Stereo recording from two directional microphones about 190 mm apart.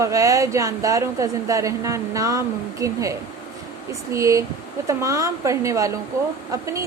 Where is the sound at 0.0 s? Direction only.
15° right (ahead or behind).